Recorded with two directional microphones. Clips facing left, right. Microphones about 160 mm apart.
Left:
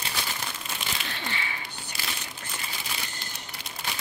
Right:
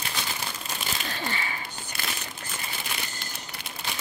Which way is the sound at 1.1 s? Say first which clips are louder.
Right 3 dB; 40° right (ahead or behind).